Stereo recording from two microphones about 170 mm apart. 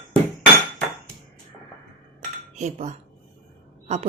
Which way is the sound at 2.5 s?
40° right (ahead or behind).